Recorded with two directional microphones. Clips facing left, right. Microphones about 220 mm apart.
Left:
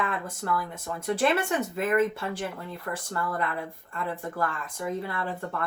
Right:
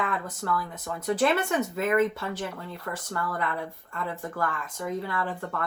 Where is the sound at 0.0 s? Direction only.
25° left (ahead or behind).